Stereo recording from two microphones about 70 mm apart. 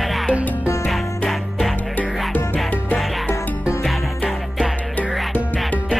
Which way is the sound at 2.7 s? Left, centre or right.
Left.